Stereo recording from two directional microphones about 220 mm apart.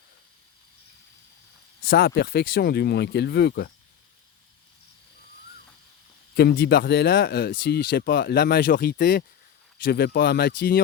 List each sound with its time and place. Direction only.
1.8 s speech: 45° left (ahead or behind)
6.3 s speech: 45° left (ahead or behind)